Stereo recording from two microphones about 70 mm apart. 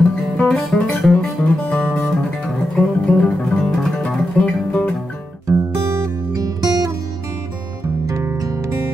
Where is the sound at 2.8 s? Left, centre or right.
Centre.